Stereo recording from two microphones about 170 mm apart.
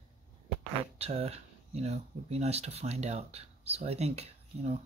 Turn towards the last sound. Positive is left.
turn(degrees=-40)  # may be behind; listen again after turning